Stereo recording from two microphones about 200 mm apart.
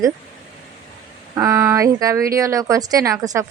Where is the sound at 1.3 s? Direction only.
15° right (ahead or behind).